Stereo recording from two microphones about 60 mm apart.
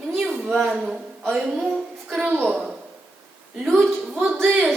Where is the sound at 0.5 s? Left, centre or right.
Centre.